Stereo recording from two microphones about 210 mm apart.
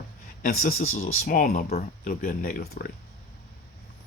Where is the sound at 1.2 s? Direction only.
40° left (ahead or behind).